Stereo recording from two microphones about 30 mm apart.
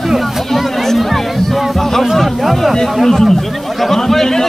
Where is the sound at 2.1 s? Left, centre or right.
Centre.